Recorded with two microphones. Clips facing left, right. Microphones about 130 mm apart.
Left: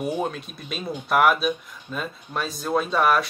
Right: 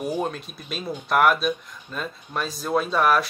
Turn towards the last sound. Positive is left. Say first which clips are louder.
# even
turn(degrees=0)  # may be behind; listen again after turning